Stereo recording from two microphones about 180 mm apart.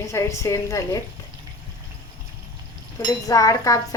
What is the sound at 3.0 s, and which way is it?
Speech, 20° left (ahead or behind).